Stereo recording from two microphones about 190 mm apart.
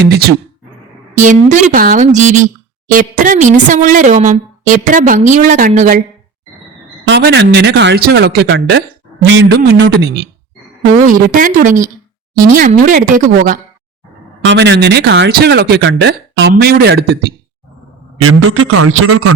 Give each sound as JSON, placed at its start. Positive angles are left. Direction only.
{"t": 1.1, "sound": "speech", "side_deg": -40}
{"t": 7.0, "sound": "speech", "side_deg": -60}
{"t": 9.2, "sound": "a sound", "side_deg": -70}
{"t": 10.9, "sound": "speech", "side_deg": -45}
{"t": 14.4, "sound": "speech", "side_deg": -65}
{"t": 18.2, "sound": "a man's voice", "side_deg": -90}